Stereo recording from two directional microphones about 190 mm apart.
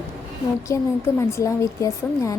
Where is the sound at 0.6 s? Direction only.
15° left (ahead or behind).